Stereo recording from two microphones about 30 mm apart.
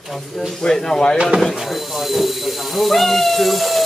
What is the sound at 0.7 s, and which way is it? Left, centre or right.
Speech, centre.